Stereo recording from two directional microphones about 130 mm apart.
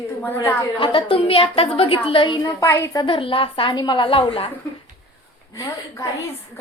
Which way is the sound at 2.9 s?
40° left (ahead or behind).